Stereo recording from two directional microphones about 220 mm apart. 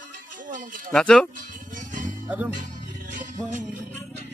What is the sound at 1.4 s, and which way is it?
Music, 35° right (ahead or behind).